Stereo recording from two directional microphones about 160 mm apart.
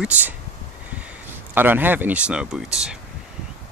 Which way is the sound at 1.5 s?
10° right (ahead or behind).